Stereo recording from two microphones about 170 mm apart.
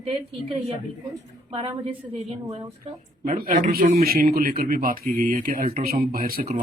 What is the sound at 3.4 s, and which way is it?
Speech, 55° right (ahead or behind).